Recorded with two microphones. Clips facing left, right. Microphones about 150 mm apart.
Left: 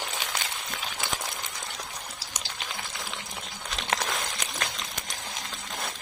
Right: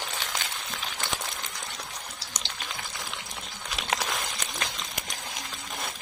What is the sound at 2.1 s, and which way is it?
Water, 5° left (ahead or behind).